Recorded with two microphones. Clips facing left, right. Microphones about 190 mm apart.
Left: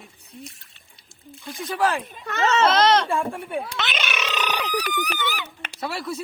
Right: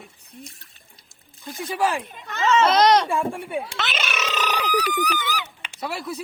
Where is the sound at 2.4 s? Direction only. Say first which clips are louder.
Right 1 dB; 40° left (ahead or behind).